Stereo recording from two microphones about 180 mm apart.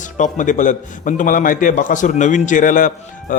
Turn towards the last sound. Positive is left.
turn(degrees=45)  # may be behind; listen again after turning